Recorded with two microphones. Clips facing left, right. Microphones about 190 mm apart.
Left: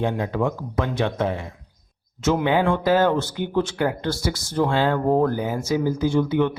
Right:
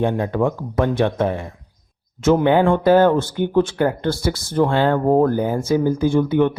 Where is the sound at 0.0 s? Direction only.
50° right (ahead or behind).